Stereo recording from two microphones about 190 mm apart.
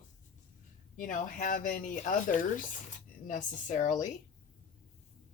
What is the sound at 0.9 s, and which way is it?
Speech, 45° left (ahead or behind).